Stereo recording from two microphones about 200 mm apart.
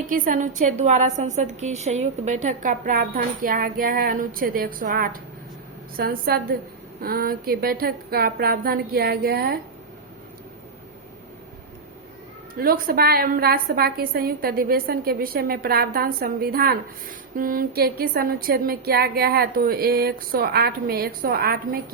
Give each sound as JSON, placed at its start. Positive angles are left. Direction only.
{"t": 0.1, "sound": "a woman's voice", "side_deg": -40}
{"t": 12.5, "sound": "a woman's voice", "side_deg": -45}